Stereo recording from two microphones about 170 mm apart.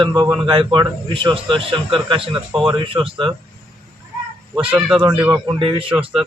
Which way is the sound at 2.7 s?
30° right (ahead or behind).